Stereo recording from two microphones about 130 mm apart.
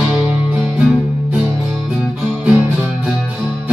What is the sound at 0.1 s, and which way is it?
Music, 10° right (ahead or behind).